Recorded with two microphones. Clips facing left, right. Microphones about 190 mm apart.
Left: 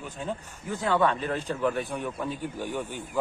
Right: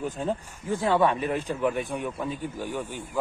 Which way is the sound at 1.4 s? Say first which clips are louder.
Right 1 dB; 5° right (ahead or behind).